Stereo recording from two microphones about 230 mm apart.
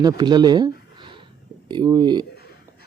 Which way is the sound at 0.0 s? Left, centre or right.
Centre.